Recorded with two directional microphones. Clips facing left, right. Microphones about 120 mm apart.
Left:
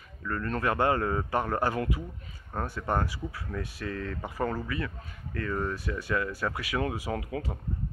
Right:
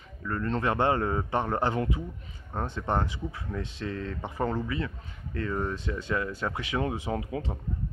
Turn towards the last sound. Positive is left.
turn(degrees=-25)  # may be behind; listen again after turning